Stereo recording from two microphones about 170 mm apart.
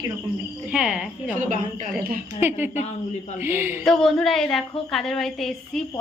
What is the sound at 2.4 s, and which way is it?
Speech, 10° right (ahead or behind).